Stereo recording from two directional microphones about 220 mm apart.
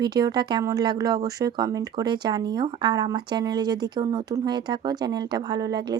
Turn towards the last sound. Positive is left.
turn(degrees=-20)  # may be behind; listen again after turning